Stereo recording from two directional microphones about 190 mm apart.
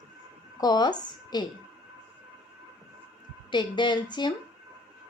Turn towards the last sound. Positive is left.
turn(degrees=25)  # may be behind; listen again after turning